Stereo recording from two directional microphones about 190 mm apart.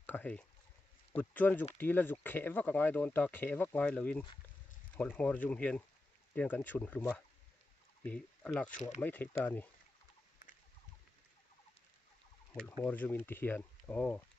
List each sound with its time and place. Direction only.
0.0 s speech: 10° left (ahead or behind)
12.5 s speech: 5° left (ahead or behind)